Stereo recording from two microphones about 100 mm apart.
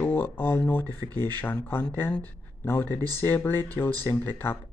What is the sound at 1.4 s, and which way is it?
Speech, 20° left (ahead or behind).